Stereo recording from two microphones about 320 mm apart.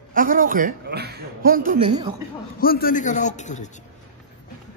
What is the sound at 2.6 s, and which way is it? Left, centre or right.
A man's voice, left.